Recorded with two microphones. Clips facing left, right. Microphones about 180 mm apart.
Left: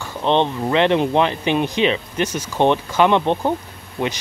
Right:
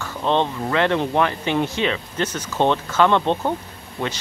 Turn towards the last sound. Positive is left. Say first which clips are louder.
# left 3 dB
turn(degrees=20)  # may be behind; listen again after turning